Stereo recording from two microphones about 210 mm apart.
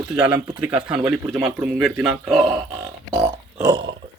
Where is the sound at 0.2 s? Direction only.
5° right (ahead or behind).